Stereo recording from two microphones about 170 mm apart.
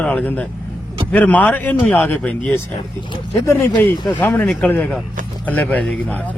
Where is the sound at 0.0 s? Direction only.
10° left (ahead or behind).